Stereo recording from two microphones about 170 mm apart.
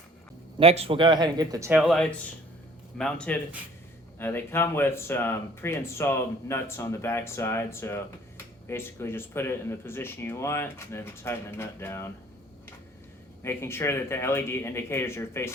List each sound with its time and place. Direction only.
0.6 s speech: 35° right (ahead or behind); by 1.7 s 20° right (ahead or behind)
1.7 s speech: centre (ahead or behind)
13.4 s speech: 15° left (ahead or behind)